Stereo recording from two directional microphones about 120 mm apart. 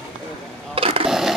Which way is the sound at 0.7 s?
50° right (ahead or behind).